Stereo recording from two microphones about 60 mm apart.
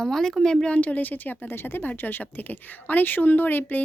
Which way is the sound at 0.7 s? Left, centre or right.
Left.